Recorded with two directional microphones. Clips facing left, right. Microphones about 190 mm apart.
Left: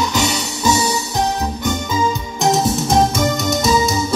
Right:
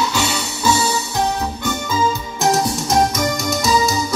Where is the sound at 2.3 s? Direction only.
Centre (ahead or behind).